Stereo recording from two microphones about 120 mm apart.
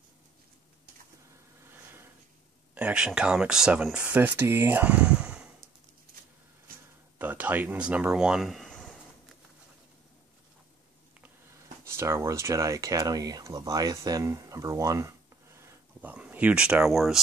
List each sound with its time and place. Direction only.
1.6 s a sound: 20° right (ahead or behind)
2.7 s speech: 10° right (ahead or behind)
7.2 s speech: 15° right (ahead or behind); by 8.9 s 5° left (ahead or behind)
11.8 s speech: 20° right (ahead or behind); by 17.2 s centre (ahead or behind)